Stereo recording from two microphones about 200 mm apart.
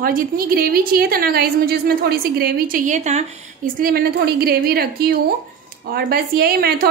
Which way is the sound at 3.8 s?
50° right (ahead or behind).